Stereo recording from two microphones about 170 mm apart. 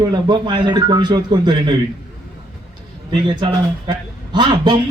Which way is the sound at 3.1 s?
25° right (ahead or behind).